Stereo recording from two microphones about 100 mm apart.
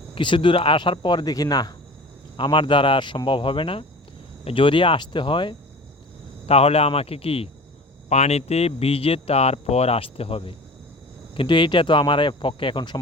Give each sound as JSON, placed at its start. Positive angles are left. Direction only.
{"t": 0.1, "sound": "speech", "side_deg": 55}
{"t": 2.3, "sound": "speech", "side_deg": 50}
{"t": 6.4, "sound": "speech", "side_deg": 90}
{"t": 8.1, "sound": "speech", "side_deg": 90}
{"t": 11.3, "sound": "speech", "side_deg": 55}